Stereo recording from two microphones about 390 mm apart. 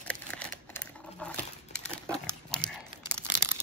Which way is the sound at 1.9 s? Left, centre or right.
Centre.